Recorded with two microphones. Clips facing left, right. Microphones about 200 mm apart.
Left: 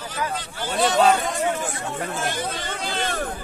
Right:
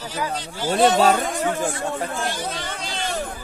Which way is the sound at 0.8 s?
50° right (ahead or behind).